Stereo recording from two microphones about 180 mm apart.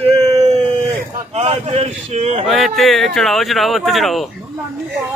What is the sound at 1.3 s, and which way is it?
Speech, 35° right (ahead or behind).